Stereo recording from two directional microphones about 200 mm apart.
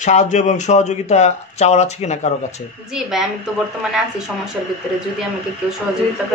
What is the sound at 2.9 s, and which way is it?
Speech, centre (ahead or behind).